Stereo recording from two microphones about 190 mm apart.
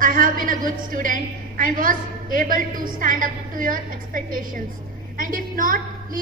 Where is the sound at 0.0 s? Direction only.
45° right (ahead or behind).